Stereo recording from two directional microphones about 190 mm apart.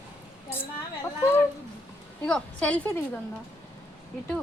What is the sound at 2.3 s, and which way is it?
Speech, 5° left (ahead or behind).